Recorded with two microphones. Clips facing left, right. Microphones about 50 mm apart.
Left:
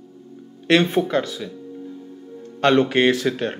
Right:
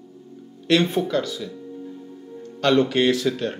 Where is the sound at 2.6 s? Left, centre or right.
Left.